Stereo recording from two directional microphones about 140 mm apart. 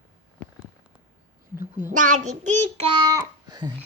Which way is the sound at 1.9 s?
65° right (ahead or behind).